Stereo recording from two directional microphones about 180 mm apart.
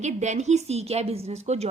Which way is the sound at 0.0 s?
40° right (ahead or behind).